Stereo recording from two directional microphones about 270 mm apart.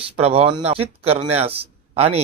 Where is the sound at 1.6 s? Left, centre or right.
Right.